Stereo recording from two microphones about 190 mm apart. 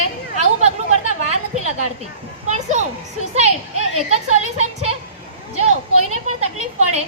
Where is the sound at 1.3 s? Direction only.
35° right (ahead or behind).